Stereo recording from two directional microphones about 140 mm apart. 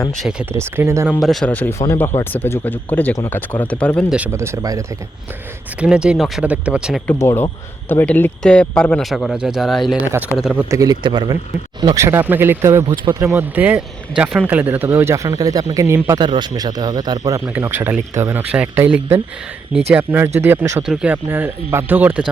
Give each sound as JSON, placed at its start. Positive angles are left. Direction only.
{"t": 0.2, "sound": "speech", "side_deg": -5}
{"t": 0.5, "sound": "speech", "side_deg": -20}
{"t": 1.2, "sound": "speech", "side_deg": 0}
{"t": 1.5, "sound": "speech", "side_deg": 15}
{"t": 4.3, "sound": "speech", "side_deg": -20}
{"t": 5.8, "sound": "speech", "side_deg": -5}
{"t": 7.1, "sound": "speech", "side_deg": 15}
{"t": 10.1, "sound": "speech", "side_deg": -10}
{"t": 10.8, "sound": "speech", "side_deg": -30}
{"t": 12.0, "sound": "speech", "side_deg": -15}
{"t": 16.2, "sound": "speech", "side_deg": -30}
{"t": 17.5, "sound": "speech", "side_deg": -15}
{"t": 20.8, "sound": "speech", "side_deg": -5}